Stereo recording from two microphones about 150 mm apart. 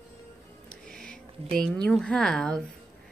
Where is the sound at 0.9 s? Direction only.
5° left (ahead or behind).